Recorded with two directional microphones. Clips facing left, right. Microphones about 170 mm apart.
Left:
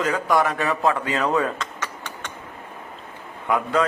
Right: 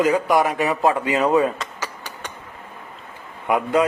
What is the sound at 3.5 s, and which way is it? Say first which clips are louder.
Speech: right 3 dB; 20° right (ahead or behind).